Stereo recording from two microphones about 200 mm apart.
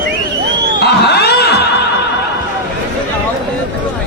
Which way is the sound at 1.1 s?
55° left (ahead or behind).